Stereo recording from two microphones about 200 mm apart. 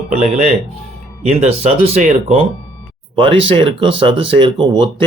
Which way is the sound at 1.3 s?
30° right (ahead or behind).